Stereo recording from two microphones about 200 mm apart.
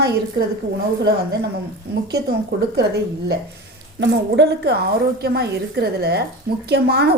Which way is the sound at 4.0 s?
60° right (ahead or behind).